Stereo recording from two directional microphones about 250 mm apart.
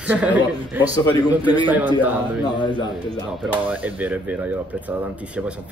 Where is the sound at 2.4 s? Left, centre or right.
Centre.